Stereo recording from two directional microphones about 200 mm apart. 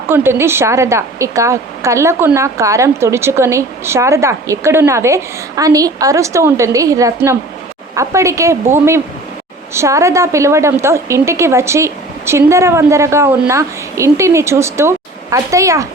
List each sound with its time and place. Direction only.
0.1 s a woman's voice: 10° right (ahead or behind)